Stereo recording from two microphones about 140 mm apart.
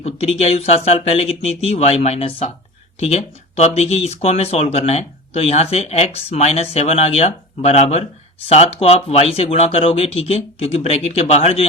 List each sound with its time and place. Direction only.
0.0 s speech: 45° left (ahead or behind)